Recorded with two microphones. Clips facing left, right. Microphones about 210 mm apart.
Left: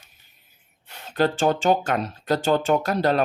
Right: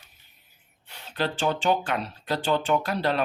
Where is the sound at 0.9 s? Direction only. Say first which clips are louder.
Left 7 dB; 50° left (ahead or behind).